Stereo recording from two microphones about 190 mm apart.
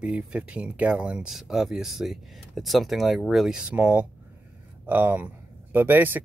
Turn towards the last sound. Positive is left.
turn(degrees=-10)  # may be behind; listen again after turning